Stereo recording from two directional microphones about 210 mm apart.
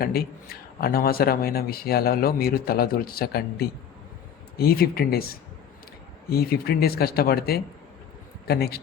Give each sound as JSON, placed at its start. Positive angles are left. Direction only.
{"t": 0.0, "sound": "a man's voice", "side_deg": 45}